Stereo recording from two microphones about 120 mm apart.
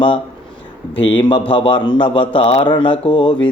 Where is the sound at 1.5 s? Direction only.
45° left (ahead or behind).